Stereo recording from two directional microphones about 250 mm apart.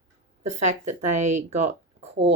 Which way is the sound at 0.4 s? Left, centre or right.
Right.